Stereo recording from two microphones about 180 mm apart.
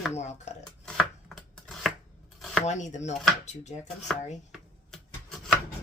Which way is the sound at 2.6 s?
40° left (ahead or behind).